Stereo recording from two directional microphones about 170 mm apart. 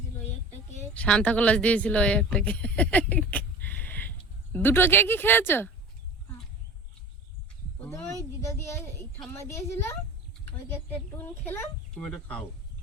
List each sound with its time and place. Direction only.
0.9 s speech: 5° left (ahead or behind)
7.8 s a sound: 15° left (ahead or behind)
9.2 s speech: 15° left (ahead or behind)
11.2 s speech: 10° left (ahead or behind)